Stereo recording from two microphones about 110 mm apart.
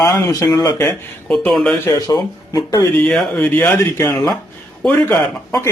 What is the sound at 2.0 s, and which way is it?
Speech, 35° left (ahead or behind).